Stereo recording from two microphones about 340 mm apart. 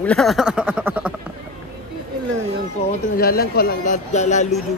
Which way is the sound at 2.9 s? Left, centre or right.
Left.